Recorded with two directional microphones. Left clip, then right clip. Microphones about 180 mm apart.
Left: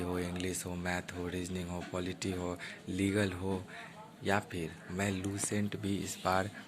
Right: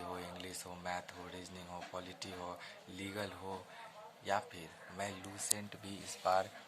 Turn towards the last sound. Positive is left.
turn(degrees=5)  # may be behind; listen again after turning